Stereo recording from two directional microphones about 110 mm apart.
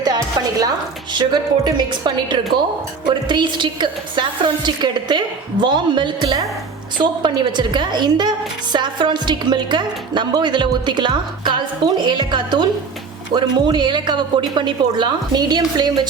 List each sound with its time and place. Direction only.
0.0 s music: 40° right (ahead or behind)
1.1 s a woman's voice: 40° right (ahead or behind)